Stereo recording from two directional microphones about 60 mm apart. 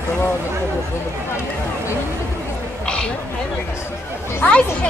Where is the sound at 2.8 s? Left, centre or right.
Centre.